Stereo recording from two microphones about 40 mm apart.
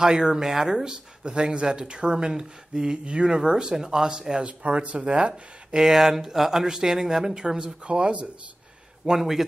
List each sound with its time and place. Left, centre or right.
0.0 s speech: centre
1.3 s speech: right
4.5 s speech: right
5.8 s speech: centre; by 8.2 s right
9.0 s speech: centre